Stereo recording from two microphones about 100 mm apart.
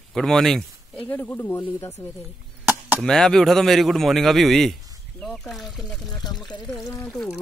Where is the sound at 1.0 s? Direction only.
25° left (ahead or behind).